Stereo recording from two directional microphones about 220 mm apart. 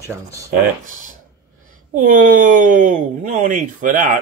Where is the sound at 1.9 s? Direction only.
35° right (ahead or behind).